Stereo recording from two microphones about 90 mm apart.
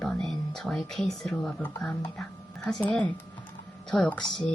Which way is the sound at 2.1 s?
10° left (ahead or behind).